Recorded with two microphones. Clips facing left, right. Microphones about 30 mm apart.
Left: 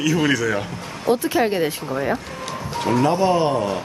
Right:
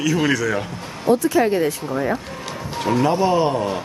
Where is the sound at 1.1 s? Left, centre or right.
Left.